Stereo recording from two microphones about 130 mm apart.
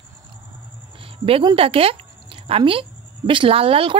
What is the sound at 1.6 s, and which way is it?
A woman's voice, 45° right (ahead or behind).